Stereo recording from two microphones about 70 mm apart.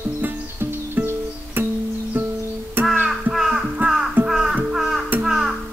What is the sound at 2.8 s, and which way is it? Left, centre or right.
Music, right.